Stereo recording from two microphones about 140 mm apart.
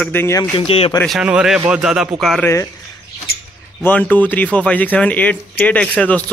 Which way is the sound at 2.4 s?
20° left (ahead or behind).